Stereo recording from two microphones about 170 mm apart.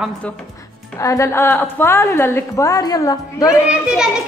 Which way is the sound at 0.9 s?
20° left (ahead or behind).